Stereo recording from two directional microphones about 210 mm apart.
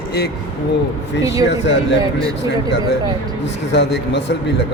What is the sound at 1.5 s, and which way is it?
Speech, 55° left (ahead or behind).